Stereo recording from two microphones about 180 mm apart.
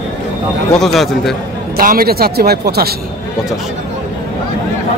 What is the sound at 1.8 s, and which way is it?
Speech, 55° right (ahead or behind).